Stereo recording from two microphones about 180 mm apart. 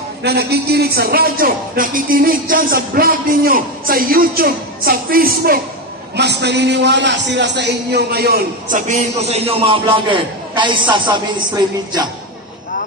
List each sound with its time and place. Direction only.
0.2 s a man's voice: 65° right (ahead or behind)
6.1 s a man's voice: 70° right (ahead or behind); by 11.1 s 25° right (ahead or behind)